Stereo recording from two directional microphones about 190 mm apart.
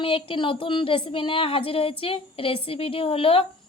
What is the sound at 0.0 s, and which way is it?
A woman's voice, 30° left (ahead or behind).